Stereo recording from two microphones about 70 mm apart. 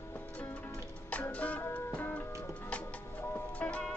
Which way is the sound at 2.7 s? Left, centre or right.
Centre.